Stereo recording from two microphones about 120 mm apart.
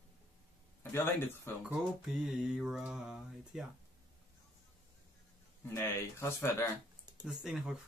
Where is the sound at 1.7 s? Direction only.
5° right (ahead or behind).